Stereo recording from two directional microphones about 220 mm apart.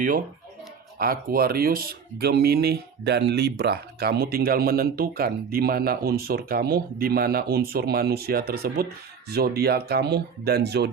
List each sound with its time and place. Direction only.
0.9 s speech: 40° right (ahead or behind)